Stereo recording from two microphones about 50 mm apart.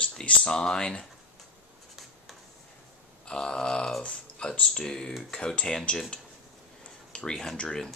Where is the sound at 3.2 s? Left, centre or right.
Centre.